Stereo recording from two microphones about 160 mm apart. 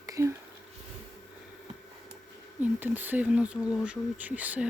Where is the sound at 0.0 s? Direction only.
20° right (ahead or behind).